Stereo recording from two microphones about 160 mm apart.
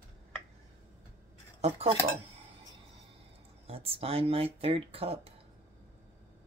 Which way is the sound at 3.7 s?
40° right (ahead or behind).